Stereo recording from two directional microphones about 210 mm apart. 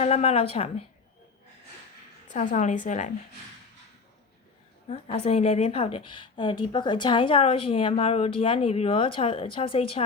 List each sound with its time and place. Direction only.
0.0 s a woman's voice: 30° left (ahead or behind)
2.3 s speech: 35° left (ahead or behind)
4.9 s a woman's voice: 30° left (ahead or behind)